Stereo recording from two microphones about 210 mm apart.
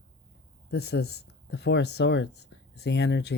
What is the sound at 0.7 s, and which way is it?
Speech, 50° left (ahead or behind).